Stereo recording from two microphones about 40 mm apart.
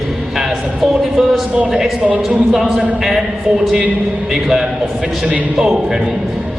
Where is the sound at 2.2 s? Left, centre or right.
Centre.